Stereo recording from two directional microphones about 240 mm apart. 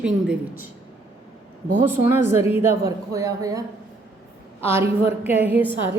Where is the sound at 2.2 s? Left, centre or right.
Left.